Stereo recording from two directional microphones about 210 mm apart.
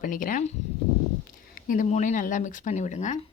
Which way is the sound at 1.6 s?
40° left (ahead or behind).